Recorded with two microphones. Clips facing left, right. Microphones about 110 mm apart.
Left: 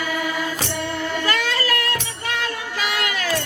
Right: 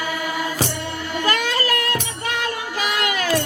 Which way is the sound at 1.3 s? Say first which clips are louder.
Right 4 dB; 20° right (ahead or behind).